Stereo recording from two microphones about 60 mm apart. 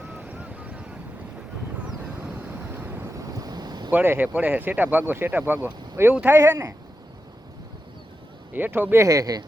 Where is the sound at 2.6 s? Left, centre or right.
Right.